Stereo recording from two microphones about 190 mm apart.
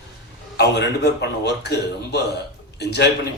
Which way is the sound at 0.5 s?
60° left (ahead or behind).